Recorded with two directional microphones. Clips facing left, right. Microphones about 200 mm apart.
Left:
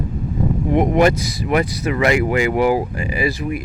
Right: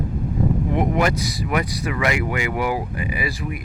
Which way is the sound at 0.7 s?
20° left (ahead or behind).